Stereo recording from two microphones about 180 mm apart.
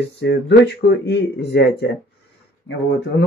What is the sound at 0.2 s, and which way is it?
Speech, 75° left (ahead or behind).